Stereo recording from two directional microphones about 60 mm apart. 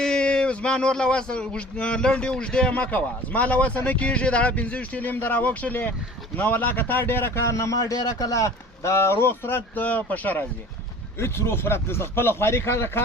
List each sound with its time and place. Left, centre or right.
0.0 s speech: centre; by 7.3 s left
7.4 s speech: left
9.8 s speech: left
11.2 s speech: left